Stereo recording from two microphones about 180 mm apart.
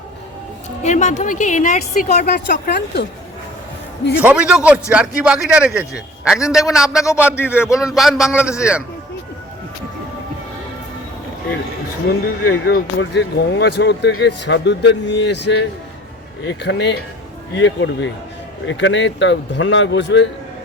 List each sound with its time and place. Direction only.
0.8 s a woman's voice: 40° left (ahead or behind)
2.0 s a woman's voice: 60° left (ahead or behind)
4.2 s a man's voice: 5° right (ahead or behind)
7.3 s speech: 15° left (ahead or behind)
7.8 s a man's voice: centre (ahead or behind)
12.0 s a woman's voice: 55° left (ahead or behind)
13.0 s speech: 80° left
17.5 s speech: 90° left